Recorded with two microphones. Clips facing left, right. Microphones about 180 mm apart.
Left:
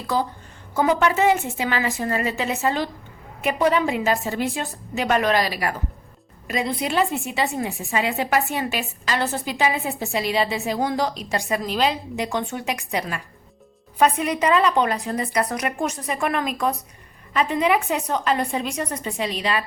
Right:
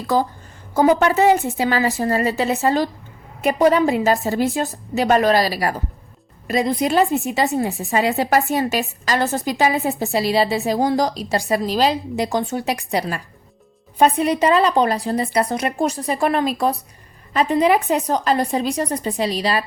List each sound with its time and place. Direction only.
0.1 s a woman's voice: 45° right (ahead or behind)